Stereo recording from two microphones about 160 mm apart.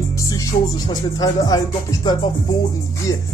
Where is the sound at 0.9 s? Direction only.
25° left (ahead or behind).